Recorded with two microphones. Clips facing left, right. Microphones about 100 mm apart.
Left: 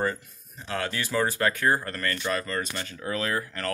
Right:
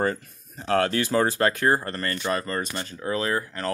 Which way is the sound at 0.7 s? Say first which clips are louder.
Right 8 dB; 45° right (ahead or behind).